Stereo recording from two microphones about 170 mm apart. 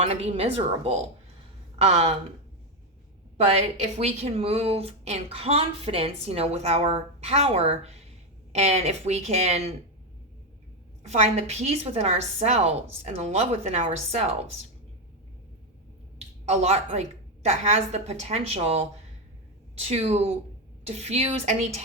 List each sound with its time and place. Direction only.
0.0 s speech: 40° right (ahead or behind)
3.3 s speech: 40° right (ahead or behind)
11.0 s speech: 40° right (ahead or behind)
16.1 s a woman's voice: 40° right (ahead or behind)
19.9 s speech: 40° right (ahead or behind)